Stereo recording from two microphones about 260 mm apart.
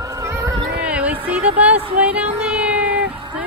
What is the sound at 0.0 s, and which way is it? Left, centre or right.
Cat, centre.